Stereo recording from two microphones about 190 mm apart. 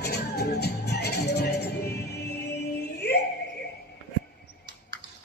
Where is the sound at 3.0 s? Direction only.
60° left (ahead or behind).